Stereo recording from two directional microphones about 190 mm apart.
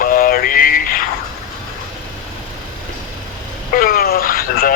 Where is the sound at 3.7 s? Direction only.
50° left (ahead or behind).